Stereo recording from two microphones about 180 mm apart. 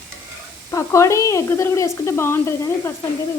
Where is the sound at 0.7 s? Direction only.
15° left (ahead or behind).